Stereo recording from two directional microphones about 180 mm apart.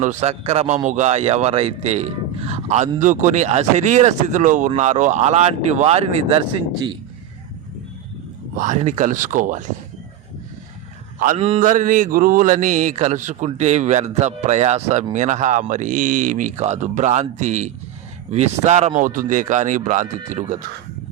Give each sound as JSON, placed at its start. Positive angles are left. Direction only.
{"t": 0.0, "sound": "speech", "side_deg": -40}
{"t": 8.5, "sound": "speech", "side_deg": -45}
{"t": 11.3, "sound": "speech", "side_deg": -35}